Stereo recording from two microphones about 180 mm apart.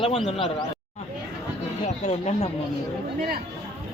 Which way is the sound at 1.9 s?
40° left (ahead or behind).